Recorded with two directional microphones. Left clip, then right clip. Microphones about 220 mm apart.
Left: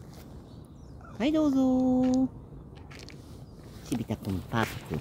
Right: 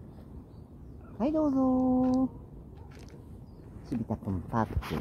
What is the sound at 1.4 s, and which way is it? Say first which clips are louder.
Speech: left 1 dB; 45° left (ahead or behind).